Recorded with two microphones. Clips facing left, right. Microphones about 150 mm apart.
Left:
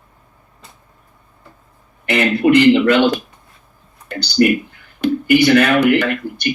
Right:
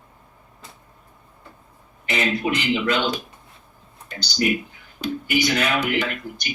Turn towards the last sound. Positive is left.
turn(degrees=60)  # may be behind; listen again after turning